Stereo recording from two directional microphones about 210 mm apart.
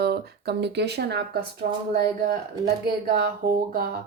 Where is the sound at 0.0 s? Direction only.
50° right (ahead or behind).